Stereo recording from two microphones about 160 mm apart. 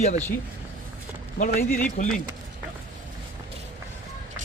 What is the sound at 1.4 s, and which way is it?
Speech, 55° left (ahead or behind).